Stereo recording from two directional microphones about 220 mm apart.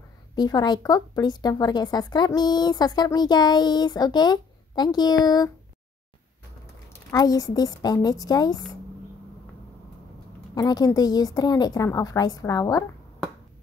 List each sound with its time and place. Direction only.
0.4 s a woman's voice: 20° left (ahead or behind)
6.9 s a woman's voice: 15° left (ahead or behind)
10.5 s a woman's voice: 15° left (ahead or behind)